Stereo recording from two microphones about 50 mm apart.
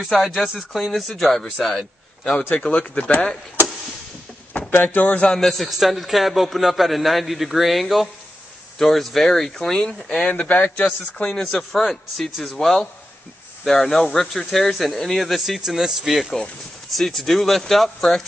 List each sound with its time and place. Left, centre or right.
0.1 s a man's voice: centre
2.7 s speech: left
4.6 s speech: left
5.3 s a man's voice: centre
10.2 s speech: left
11.2 s a man's voice: centre